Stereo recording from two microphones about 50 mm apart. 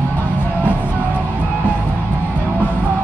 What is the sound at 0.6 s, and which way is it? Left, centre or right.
Music, right.